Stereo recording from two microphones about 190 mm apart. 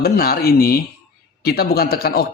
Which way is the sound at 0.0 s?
55° left (ahead or behind).